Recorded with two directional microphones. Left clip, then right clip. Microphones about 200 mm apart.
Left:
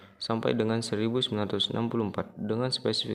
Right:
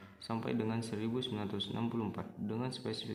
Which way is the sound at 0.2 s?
50° left (ahead or behind).